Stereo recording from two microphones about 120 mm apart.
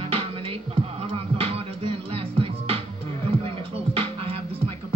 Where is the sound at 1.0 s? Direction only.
50° right (ahead or behind).